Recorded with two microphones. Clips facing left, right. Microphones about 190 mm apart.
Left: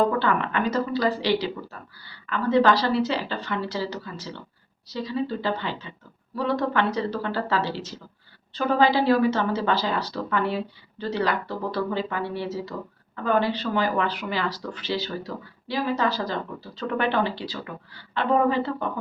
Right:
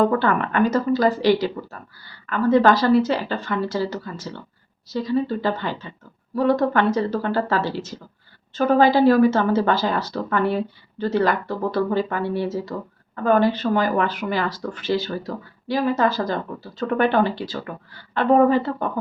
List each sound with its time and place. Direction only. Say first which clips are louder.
0.2 s a woman's voice: right 5 dB; 45° right (ahead or behind)